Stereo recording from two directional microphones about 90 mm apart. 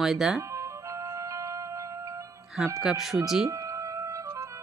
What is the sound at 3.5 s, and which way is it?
Music, 35° right (ahead or behind).